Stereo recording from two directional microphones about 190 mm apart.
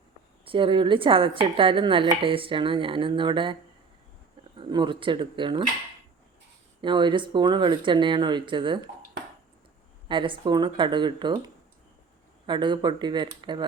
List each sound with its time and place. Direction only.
0.4 s a woman's voice: 25° right (ahead or behind)
6.8 s a woman's voice: 25° right (ahead or behind)
10.1 s a woman's voice: 25° right (ahead or behind)